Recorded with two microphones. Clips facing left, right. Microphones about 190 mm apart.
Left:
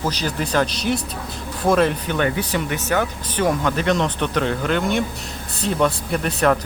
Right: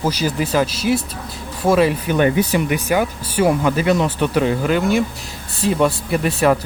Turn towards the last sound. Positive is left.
turn(degrees=-5)  # may be behind; listen again after turning